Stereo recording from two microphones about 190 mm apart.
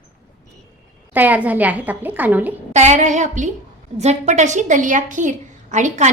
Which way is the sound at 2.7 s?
40° right (ahead or behind).